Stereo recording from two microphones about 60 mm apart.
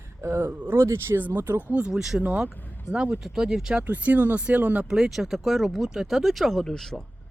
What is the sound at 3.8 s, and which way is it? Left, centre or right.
Speech, right.